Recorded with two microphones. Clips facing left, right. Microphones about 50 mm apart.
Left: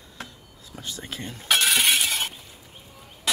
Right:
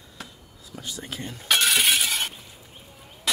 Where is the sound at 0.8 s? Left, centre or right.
Left.